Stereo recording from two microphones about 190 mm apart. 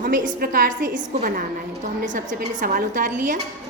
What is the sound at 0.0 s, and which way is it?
A woman's voice, 50° right (ahead or behind).